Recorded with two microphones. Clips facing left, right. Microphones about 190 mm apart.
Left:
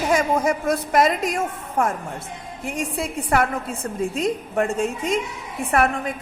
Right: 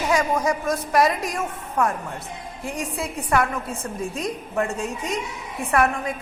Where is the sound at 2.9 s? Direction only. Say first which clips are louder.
Left 1 dB; 30° left (ahead or behind).